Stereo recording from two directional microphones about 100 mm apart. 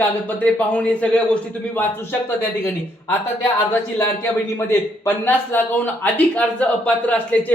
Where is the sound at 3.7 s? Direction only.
25° left (ahead or behind).